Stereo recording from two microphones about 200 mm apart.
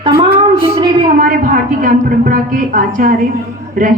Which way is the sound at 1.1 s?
45° right (ahead or behind).